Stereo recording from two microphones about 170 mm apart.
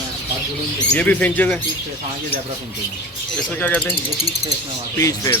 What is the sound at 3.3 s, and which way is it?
Speech, 5° left (ahead or behind).